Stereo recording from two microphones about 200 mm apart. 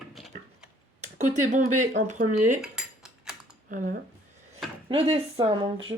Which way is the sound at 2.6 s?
Centre (ahead or behind).